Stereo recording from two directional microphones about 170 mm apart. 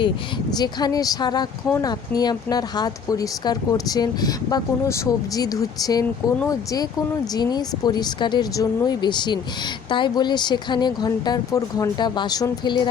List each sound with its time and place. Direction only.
0.5 s speech: 25° left (ahead or behind)